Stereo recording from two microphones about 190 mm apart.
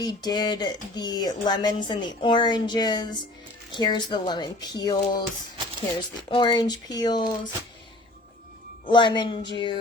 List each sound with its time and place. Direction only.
0.0 s speech: 20° left (ahead or behind)
8.9 s speech: 25° left (ahead or behind)